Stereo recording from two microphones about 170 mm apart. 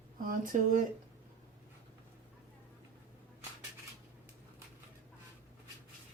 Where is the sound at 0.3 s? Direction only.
55° right (ahead or behind).